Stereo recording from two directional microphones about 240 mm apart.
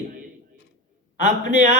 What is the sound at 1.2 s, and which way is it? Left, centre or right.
Speech, right.